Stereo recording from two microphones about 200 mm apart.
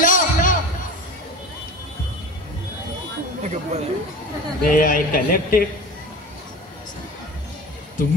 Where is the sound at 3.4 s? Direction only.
35° right (ahead or behind).